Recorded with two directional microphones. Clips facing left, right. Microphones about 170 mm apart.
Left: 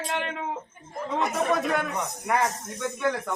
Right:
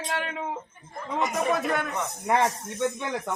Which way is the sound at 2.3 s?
25° right (ahead or behind).